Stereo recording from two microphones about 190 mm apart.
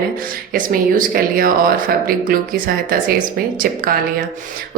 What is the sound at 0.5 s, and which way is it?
A woman's voice, 45° right (ahead or behind).